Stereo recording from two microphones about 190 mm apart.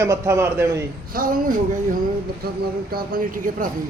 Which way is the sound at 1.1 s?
50° right (ahead or behind).